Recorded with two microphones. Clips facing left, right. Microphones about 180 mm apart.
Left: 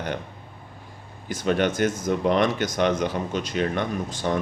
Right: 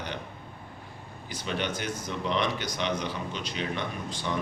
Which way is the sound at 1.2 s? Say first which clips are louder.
Left 9 dB; 50° left (ahead or behind).